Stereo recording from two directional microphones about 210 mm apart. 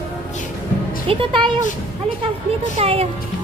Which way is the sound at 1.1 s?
25° right (ahead or behind).